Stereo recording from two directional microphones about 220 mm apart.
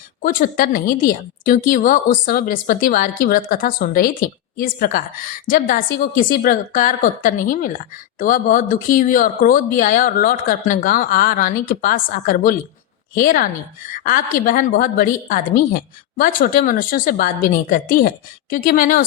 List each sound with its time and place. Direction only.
0.2 s a woman's voice: 40° left (ahead or behind)